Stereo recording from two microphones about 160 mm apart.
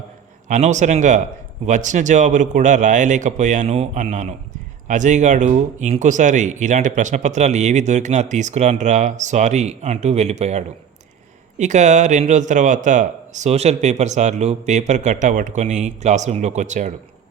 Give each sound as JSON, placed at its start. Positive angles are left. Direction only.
{"t": 0.4, "sound": "speech", "side_deg": -50}